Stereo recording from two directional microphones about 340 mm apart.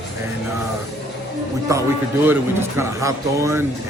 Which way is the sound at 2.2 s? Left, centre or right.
Centre.